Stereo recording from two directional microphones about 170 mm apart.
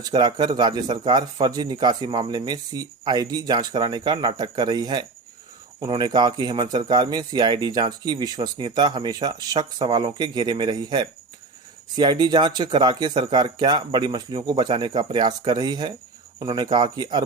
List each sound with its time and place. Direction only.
0.0 s speech: 25° right (ahead or behind)